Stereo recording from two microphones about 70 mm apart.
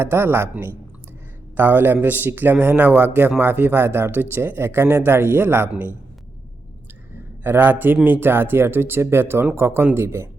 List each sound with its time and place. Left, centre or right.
0.0 s speech: right
1.5 s a man's voice: right
7.4 s a man's voice: right